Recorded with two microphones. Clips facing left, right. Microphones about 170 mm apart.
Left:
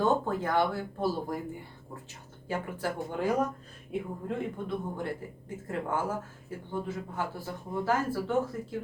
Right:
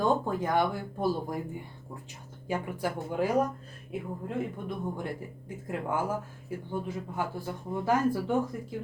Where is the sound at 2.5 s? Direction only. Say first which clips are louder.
Right 2 dB; 15° right (ahead or behind).